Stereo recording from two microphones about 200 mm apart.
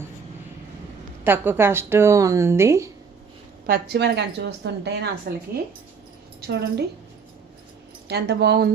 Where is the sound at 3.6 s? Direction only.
50° right (ahead or behind).